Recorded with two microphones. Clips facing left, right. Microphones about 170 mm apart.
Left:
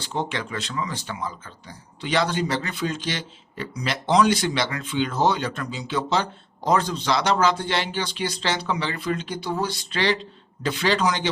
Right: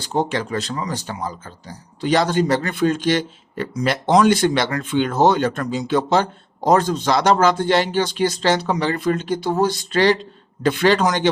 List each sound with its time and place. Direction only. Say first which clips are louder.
0.0 s a man's voice: right 6 dB; 40° right (ahead or behind)